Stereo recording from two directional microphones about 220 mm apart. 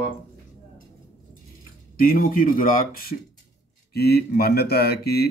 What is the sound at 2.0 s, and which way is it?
Speech, 40° left (ahead or behind).